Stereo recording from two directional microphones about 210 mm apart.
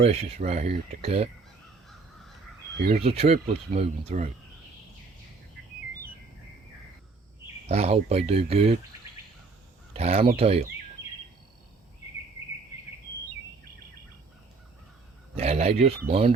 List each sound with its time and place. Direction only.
0.0 s speech: 30° right (ahead or behind)
2.9 s speech: 30° right (ahead or behind)
7.7 s speech: 30° right (ahead or behind)
9.9 s speech: 30° right (ahead or behind)
15.4 s speech: 30° right (ahead or behind)